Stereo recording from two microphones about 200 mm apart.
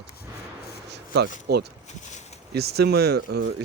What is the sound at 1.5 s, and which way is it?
Speech, 55° right (ahead or behind).